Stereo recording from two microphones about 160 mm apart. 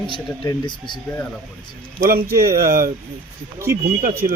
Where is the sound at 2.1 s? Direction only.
70° right (ahead or behind).